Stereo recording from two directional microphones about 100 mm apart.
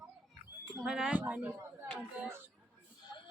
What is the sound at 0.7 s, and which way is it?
Speech, 5° right (ahead or behind).